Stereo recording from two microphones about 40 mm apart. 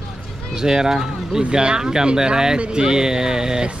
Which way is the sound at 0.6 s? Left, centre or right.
Centre.